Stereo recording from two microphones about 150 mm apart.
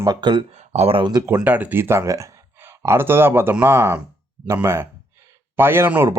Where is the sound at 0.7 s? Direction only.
40° right (ahead or behind).